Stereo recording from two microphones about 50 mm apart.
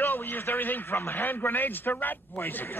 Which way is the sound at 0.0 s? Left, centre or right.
Left.